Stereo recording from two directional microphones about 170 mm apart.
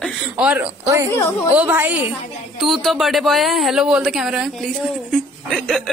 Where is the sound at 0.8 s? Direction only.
20° right (ahead or behind).